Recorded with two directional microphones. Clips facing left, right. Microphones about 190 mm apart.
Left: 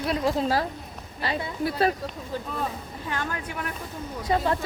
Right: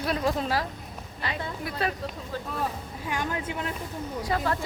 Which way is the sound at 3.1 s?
15° right (ahead or behind).